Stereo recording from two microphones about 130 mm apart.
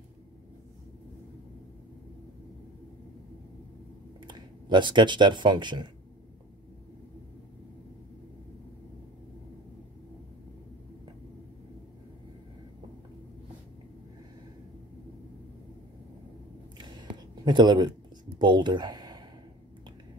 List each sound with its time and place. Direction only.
4.3 s speech: 35° right (ahead or behind)
17.5 s speech: 35° right (ahead or behind)